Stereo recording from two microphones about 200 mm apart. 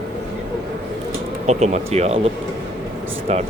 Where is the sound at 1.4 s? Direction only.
35° right (ahead or behind).